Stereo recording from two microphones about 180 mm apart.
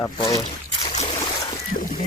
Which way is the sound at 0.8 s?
40° left (ahead or behind).